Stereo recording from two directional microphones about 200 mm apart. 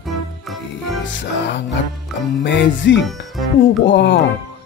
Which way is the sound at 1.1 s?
60° left (ahead or behind).